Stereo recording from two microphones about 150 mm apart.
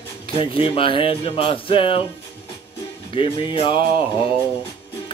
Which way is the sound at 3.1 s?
35° left (ahead or behind).